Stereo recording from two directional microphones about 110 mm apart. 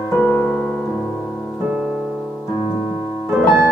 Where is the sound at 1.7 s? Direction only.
5° right (ahead or behind).